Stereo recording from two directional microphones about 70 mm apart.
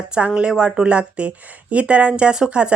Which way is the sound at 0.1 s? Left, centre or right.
Centre.